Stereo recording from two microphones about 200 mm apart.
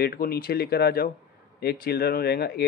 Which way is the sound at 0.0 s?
50° left (ahead or behind).